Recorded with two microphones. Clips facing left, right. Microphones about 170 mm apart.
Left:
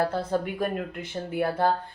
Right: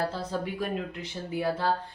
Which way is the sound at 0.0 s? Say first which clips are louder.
Left 5 dB; 55° left (ahead or behind).